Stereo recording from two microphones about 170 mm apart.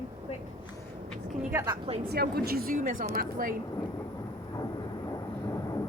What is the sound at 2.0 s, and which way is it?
A woman's voice, 65° right (ahead or behind).